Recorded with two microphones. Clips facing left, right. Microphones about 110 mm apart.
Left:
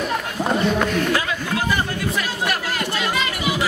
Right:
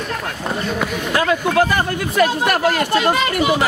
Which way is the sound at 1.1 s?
55° right (ahead or behind).